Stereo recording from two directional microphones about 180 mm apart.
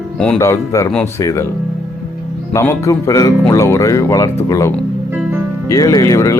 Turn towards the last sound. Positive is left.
turn(degrees=20)  # may be behind; listen again after turning